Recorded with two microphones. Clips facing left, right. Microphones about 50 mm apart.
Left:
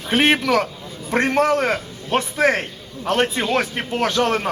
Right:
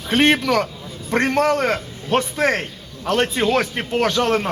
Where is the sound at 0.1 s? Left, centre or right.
Centre.